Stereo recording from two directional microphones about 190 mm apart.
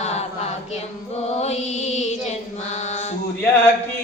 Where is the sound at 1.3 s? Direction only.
35° left (ahead or behind).